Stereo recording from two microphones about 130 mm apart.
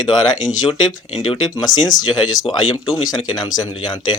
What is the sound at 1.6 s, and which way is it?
Speech, 30° left (ahead or behind).